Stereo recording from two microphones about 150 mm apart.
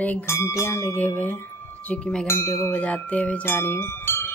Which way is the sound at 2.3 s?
15° left (ahead or behind).